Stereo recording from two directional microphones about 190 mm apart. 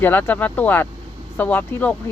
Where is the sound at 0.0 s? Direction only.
10° left (ahead or behind).